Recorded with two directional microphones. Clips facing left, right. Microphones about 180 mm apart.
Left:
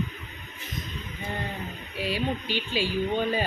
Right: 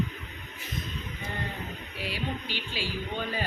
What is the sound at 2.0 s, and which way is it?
Speech, 15° left (ahead or behind).